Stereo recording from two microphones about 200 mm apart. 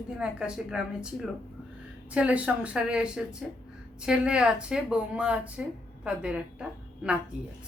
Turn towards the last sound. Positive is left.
turn(degrees=-5)  # may be behind; listen again after turning